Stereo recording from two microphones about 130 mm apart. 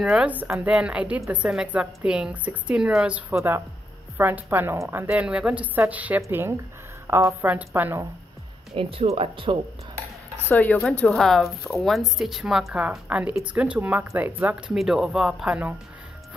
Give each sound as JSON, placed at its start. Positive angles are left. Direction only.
{"t": 0.0, "sound": "a woman's voice", "side_deg": -5}
{"t": 8.7, "sound": "speech", "side_deg": -50}
{"t": 10.5, "sound": "a woman's voice", "side_deg": 10}